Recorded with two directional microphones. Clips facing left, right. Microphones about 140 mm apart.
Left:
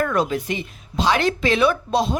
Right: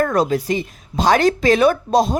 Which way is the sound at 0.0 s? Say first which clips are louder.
Right 4 dB; 40° right (ahead or behind).